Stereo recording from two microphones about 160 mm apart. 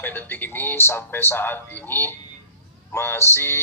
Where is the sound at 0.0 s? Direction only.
10° left (ahead or behind).